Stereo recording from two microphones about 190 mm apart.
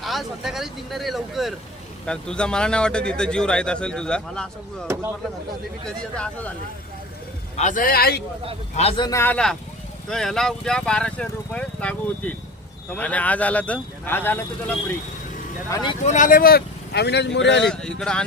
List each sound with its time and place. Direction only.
0.0 s speech: centre (ahead or behind)
6.1 s speech: 5° left (ahead or behind)
7.5 s a man's voice: 40° left (ahead or behind)
8.7 s a man's voice: 30° left (ahead or behind)
9.0 s speech: 15° left (ahead or behind)
15.7 s speech: 20° left (ahead or behind)
16.0 s speech: 40° left (ahead or behind); by 17.6 s 70° left (ahead or behind)
17.6 s speech: 5° left (ahead or behind)